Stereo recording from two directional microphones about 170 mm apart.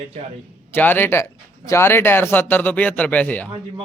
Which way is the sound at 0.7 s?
10° left (ahead or behind).